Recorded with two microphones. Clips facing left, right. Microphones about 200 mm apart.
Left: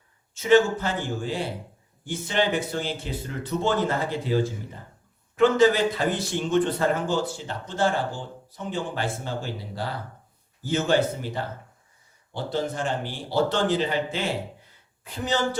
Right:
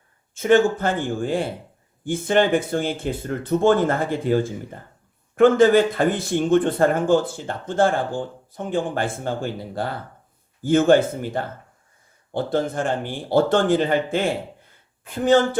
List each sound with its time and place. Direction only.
0.3 s speech: 50° right (ahead or behind)